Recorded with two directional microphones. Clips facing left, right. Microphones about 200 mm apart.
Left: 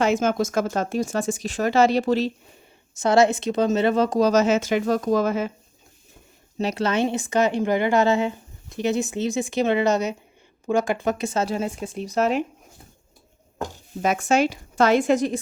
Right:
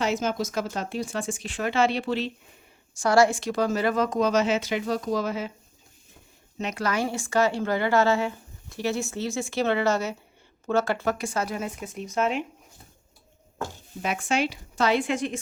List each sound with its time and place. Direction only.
0.0 s speech: 50° left (ahead or behind)
2.9 s speech: 20° left (ahead or behind); by 5.5 s 50° left (ahead or behind)
6.6 s a woman's voice: 30° left (ahead or behind)
14.0 s speech: 45° left (ahead or behind)